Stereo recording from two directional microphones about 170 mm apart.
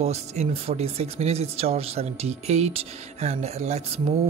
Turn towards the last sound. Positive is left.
turn(degrees=-40)  # may be behind; listen again after turning